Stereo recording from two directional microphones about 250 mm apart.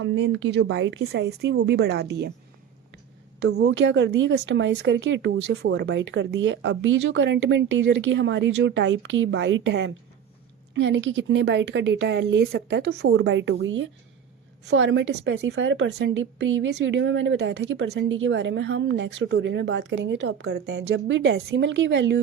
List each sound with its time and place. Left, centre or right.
0.0 s a woman's voice: right
3.4 s a woman's voice: right